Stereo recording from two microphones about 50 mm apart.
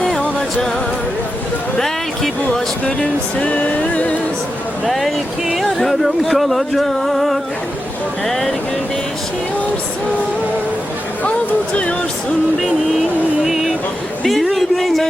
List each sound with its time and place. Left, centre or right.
0.0 s music: centre
2.5 s music: centre
4.9 s speech: centre
11.2 s music: left
13.4 s a sound: centre
14.3 s speech: centre